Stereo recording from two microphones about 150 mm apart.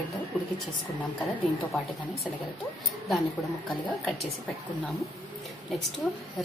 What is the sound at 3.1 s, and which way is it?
A woman's voice, centre (ahead or behind).